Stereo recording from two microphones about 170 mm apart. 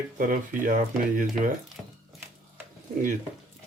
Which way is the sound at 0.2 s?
55° right (ahead or behind).